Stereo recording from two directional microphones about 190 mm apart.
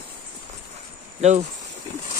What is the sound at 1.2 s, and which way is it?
Speech, 35° right (ahead or behind).